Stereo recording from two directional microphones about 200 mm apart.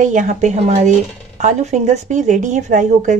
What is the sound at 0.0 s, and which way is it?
A woman's voice, 40° right (ahead or behind).